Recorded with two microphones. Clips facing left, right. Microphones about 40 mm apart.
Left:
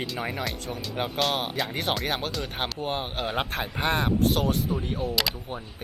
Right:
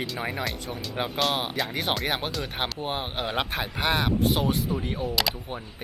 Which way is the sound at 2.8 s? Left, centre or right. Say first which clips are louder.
Left 1 dB; centre.